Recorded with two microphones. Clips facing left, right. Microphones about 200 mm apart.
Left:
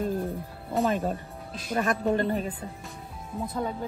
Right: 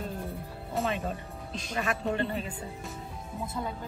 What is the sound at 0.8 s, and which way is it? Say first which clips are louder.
Speech: left 5 dB; 45° left (ahead or behind).